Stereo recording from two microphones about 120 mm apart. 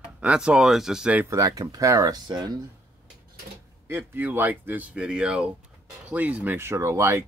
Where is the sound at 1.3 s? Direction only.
30° right (ahead or behind).